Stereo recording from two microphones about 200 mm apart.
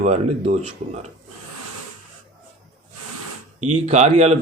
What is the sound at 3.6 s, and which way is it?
Speech, 35° right (ahead or behind).